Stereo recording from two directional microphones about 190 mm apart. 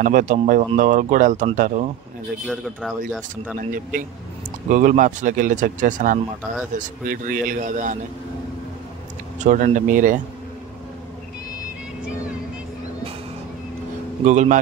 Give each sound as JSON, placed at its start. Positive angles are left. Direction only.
{"t": 0.0, "sound": "speech", "side_deg": -40}
{"t": 2.4, "sound": "speech", "side_deg": 0}
{"t": 3.5, "sound": "speech", "side_deg": -45}
{"t": 9.4, "sound": "speech", "side_deg": -40}
{"t": 14.2, "sound": "a man's voice", "side_deg": -40}